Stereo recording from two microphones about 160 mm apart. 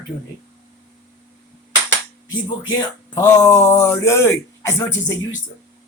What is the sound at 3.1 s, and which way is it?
A man's voice, 25° left (ahead or behind).